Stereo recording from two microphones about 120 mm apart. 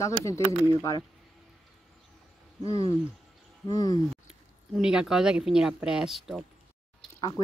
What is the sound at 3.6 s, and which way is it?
Speech, 30° left (ahead or behind).